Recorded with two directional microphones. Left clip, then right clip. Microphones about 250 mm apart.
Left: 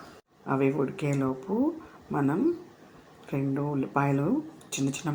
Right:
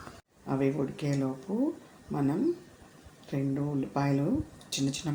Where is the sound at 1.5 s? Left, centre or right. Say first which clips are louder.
Left 4 dB; centre.